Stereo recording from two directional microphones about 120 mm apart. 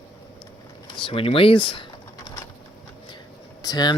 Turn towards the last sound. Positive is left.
turn(degrees=35)  # may be behind; listen again after turning